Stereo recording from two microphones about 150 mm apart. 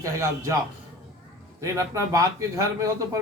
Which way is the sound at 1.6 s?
20° right (ahead or behind).